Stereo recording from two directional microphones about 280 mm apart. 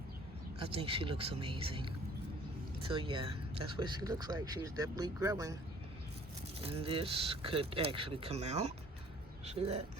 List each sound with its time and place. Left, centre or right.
0.6 s speech: centre
6.6 s speech: right